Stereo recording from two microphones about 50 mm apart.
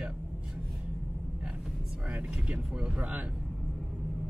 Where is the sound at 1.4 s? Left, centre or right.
Centre.